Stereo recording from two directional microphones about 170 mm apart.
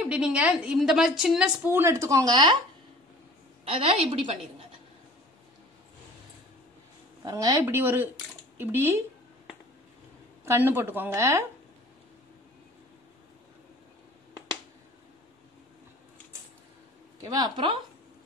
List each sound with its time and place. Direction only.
0.0 s a woman's voice: 5° right (ahead or behind)
1.7 s speech: 15° right (ahead or behind)
3.6 s a woman's voice: 35° right (ahead or behind)
7.2 s speech: 20° right (ahead or behind)
10.4 s speech: 15° right (ahead or behind)
17.2 s speech: 25° right (ahead or behind)